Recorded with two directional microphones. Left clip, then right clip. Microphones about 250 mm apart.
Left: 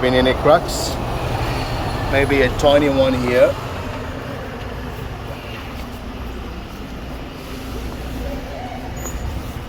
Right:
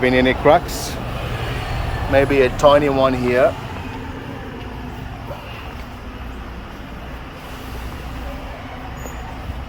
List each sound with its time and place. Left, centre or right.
0.0 s speech: centre
2.1 s speech: right